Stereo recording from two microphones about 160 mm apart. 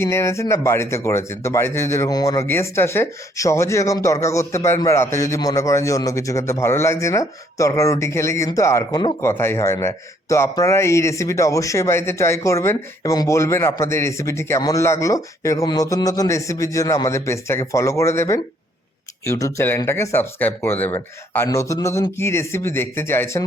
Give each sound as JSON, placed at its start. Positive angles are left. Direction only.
{"t": 0.0, "sound": "speech", "side_deg": 15}
{"t": 9.2, "sound": "a man's voice", "side_deg": 15}